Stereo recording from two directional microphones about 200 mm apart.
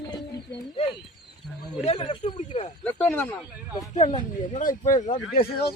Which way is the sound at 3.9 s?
30° left (ahead or behind).